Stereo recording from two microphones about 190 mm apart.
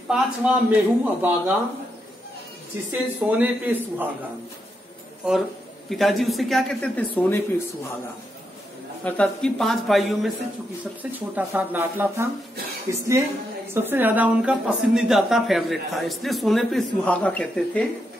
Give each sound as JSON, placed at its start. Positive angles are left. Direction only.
{"t": 0.1, "sound": "speech", "side_deg": -5}
{"t": 2.9, "sound": "speech", "side_deg": -10}
{"t": 5.9, "sound": "speech", "side_deg": 0}
{"t": 9.0, "sound": "speech", "side_deg": 5}